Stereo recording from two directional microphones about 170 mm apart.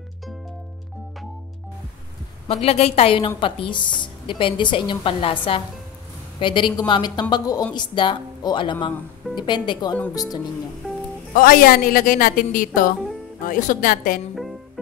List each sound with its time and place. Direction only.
2.4 s a woman's voice: 35° left (ahead or behind)
11.3 s a woman's voice: 55° left (ahead or behind)
14.3 s music: centre (ahead or behind)